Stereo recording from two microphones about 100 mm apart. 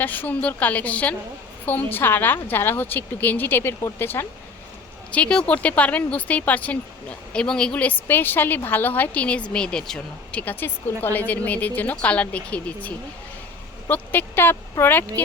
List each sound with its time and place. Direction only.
0.0 s a woman's voice: 20° left (ahead or behind)
5.1 s a woman's voice: 10° left (ahead or behind)
10.4 s a woman's voice: 20° left (ahead or behind)